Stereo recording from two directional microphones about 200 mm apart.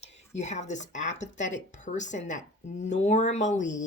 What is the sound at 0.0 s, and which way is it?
Speech, 35° left (ahead or behind).